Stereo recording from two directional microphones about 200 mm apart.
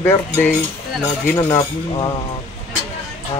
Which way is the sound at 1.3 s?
20° left (ahead or behind).